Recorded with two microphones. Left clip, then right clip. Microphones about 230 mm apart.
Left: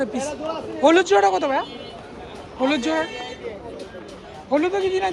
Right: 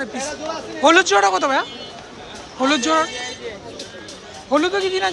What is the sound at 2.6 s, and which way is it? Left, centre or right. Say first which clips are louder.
Speech: right 4 dB; centre.